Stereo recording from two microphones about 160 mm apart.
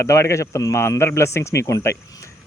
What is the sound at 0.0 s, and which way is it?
A man's voice, 20° left (ahead or behind).